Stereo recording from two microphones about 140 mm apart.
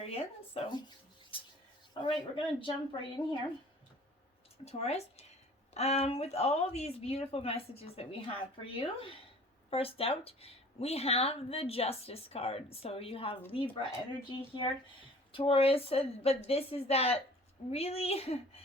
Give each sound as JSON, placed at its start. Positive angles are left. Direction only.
{"t": 0.0, "sound": "speech", "side_deg": 45}
{"t": 1.9, "sound": "speech", "side_deg": 35}
{"t": 4.6, "sound": "speech", "side_deg": 50}